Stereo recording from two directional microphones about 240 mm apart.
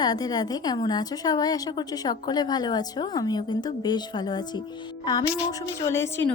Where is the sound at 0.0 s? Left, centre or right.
Centre.